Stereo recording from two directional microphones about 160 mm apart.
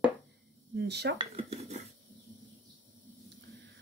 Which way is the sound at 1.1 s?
40° right (ahead or behind).